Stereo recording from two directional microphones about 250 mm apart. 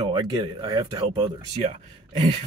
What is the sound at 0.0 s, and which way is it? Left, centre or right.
Speech, centre.